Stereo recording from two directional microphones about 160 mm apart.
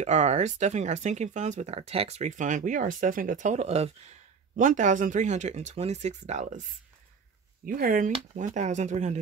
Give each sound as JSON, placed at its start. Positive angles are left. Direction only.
{"t": 0.0, "sound": "speech", "side_deg": -45}
{"t": 7.6, "sound": "speech", "side_deg": -60}
{"t": 8.4, "sound": "speech", "side_deg": -50}